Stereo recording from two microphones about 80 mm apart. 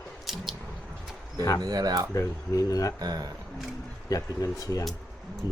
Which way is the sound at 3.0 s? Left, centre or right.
Right.